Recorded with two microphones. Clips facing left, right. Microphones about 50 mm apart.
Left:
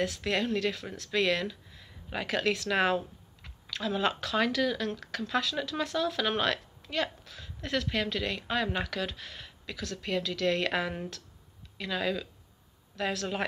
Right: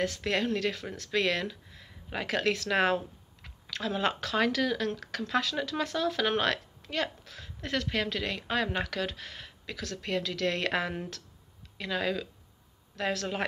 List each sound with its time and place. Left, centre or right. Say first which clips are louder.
0.2 s speech: even; right